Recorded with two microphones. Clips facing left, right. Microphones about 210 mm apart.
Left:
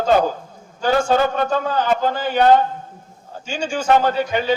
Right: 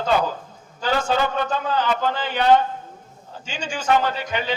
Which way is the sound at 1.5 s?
50° left (ahead or behind).